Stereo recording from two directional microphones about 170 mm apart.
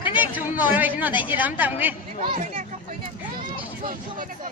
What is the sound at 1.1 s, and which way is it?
Speech, 25° left (ahead or behind).